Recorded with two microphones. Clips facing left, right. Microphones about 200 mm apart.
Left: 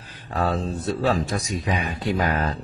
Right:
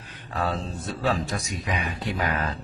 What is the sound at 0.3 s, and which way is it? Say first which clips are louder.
Speech: left 4 dB; 40° left (ahead or behind).